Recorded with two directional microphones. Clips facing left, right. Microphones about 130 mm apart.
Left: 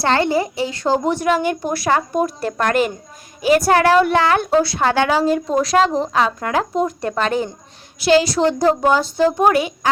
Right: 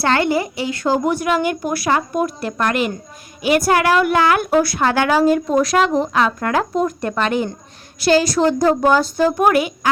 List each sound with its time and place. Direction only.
0.0 s a woman's voice: 30° left (ahead or behind)
8.0 s a woman's voice: 25° left (ahead or behind)